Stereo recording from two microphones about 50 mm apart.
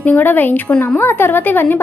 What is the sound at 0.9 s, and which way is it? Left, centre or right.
Speech, left.